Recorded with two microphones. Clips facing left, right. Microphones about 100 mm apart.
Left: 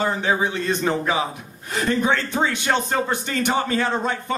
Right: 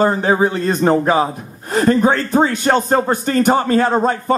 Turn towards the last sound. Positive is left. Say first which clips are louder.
# right 8 dB
turn(degrees=-40)  # may be behind; listen again after turning